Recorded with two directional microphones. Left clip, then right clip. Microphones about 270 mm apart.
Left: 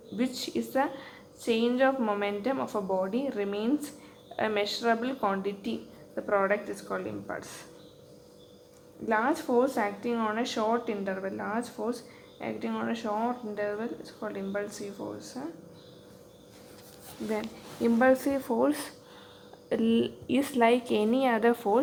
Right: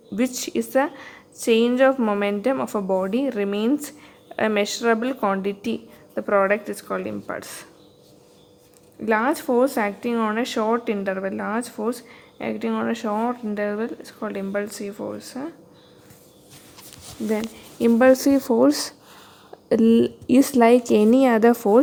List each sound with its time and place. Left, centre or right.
0.3 s a woman's voice: right
9.0 s a woman's voice: right
17.2 s a woman's voice: right